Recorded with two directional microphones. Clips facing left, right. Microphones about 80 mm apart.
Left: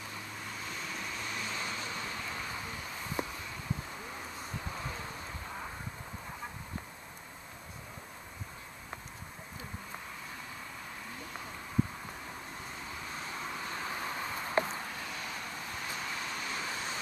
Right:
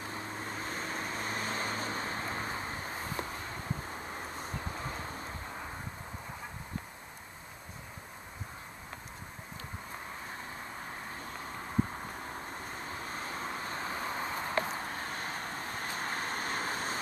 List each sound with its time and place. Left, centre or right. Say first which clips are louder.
0.0 s vehicle: right 4 dB; right
3.3 s a sound: right 1 dB; right
12.6 s vehicle: right 2 dB; right